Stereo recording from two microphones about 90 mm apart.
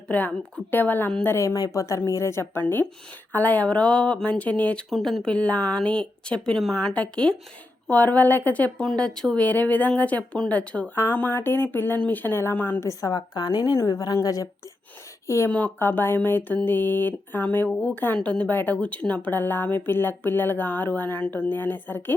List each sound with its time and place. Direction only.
0.1 s speech: 15° left (ahead or behind)
8.8 s speech: 5° left (ahead or behind)
10.9 s speech: 25° left (ahead or behind)
12.8 s a woman's voice: 40° left (ahead or behind)
15.4 s speech: 15° left (ahead or behind)